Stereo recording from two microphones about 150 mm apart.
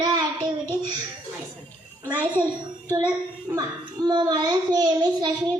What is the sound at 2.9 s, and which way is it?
Child singing, 25° right (ahead or behind).